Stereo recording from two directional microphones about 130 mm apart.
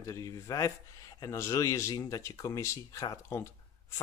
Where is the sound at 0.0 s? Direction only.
25° left (ahead or behind).